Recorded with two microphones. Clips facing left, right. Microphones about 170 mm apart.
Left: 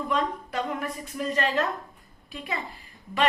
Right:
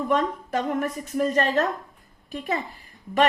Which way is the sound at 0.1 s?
45° right (ahead or behind).